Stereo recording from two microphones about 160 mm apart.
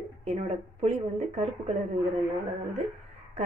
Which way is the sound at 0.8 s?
45° right (ahead or behind).